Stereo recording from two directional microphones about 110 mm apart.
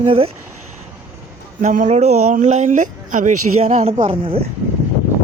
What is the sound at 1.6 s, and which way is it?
Speech, 90° right.